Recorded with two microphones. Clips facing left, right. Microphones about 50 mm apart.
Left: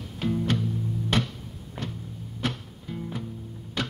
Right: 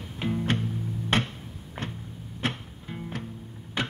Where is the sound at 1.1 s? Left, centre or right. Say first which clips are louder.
Right 1 dB; right.